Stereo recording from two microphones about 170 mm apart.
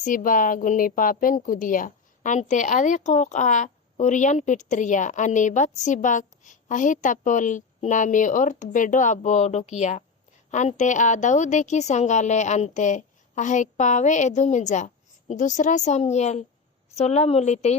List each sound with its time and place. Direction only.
0.0 s a woman's voice: 50° left (ahead or behind)